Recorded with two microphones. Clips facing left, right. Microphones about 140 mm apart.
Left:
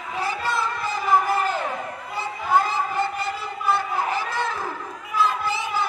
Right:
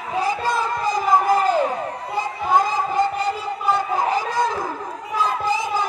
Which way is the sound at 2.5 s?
15° right (ahead or behind).